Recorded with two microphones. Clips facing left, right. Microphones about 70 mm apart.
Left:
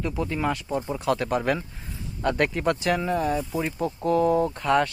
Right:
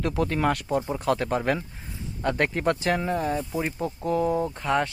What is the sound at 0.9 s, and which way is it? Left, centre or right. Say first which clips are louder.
Speech: left 4 dB; right.